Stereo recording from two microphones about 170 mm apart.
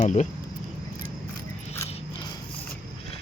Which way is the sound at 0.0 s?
45° left (ahead or behind).